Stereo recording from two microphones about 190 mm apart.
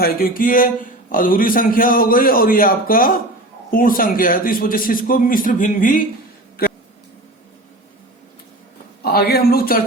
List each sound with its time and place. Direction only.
0.0 s a man's voice: 50° left (ahead or behind)
9.0 s a man's voice: 55° left (ahead or behind)